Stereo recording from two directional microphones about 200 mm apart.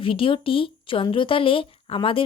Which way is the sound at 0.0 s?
25° left (ahead or behind).